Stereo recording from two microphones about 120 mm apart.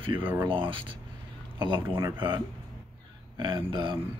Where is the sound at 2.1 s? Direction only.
40° right (ahead or behind).